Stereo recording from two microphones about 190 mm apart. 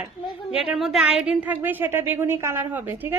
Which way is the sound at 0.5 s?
Centre (ahead or behind).